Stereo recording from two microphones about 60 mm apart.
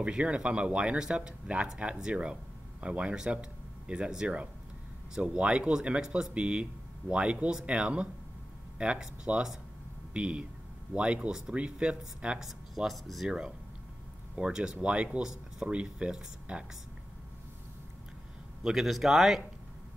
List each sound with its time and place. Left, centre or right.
0.2 s speech: centre
12.4 s speech: centre
14.3 s speech: centre
18.6 s speech: centre